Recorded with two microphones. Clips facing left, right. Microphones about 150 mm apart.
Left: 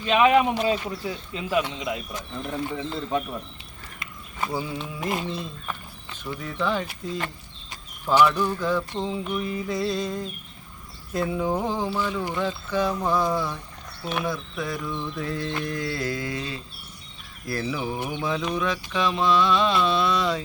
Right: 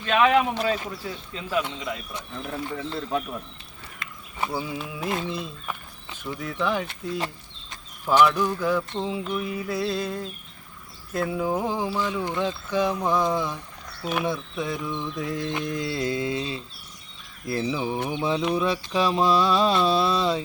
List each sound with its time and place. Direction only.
0.0 s speech: 15° left (ahead or behind)
2.7 s mantra: centre (ahead or behind)
4.4 s speech: 5° right (ahead or behind)
8.2 s speech: 10° right (ahead or behind)
9.0 s mantra: 5° right (ahead or behind)
11.1 s speech: centre (ahead or behind)
14.3 s mantra: 20° right (ahead or behind)
18.5 s a sound: 30° right (ahead or behind)